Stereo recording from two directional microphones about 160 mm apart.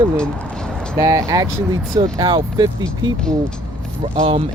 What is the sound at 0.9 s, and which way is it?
Speech, 20° right (ahead or behind).